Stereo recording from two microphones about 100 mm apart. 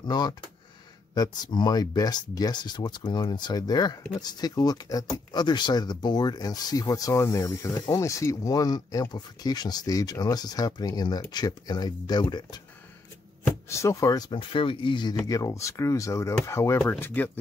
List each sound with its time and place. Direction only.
0.0 s speech: 45° left (ahead or behind)
13.7 s speech: 30° left (ahead or behind)
14.3 s speech: 60° left (ahead or behind)
15.2 s speech: 35° left (ahead or behind); by 17.3 s 15° left (ahead or behind)